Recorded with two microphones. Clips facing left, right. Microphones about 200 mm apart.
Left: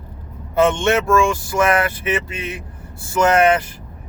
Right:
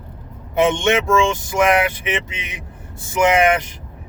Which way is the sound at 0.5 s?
15° right (ahead or behind).